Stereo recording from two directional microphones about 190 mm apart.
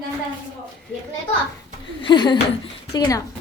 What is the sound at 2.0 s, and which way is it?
Speech, 25° left (ahead or behind).